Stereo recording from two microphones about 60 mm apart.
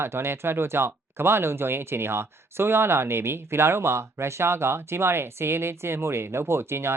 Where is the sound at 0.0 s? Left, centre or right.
Right.